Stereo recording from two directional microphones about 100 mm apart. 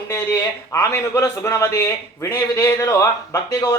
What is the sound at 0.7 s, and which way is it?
A man's voice, 30° left (ahead or behind).